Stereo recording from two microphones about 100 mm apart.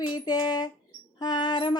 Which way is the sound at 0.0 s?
45° left (ahead or behind).